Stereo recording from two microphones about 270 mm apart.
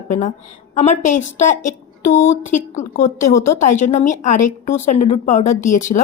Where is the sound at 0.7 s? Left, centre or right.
Left.